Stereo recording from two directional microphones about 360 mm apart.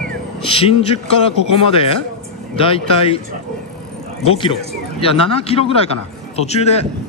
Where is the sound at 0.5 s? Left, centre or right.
Centre.